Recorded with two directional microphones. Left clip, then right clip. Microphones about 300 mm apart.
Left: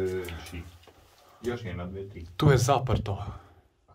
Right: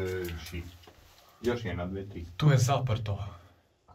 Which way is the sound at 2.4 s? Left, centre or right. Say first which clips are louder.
Left 5 dB; centre.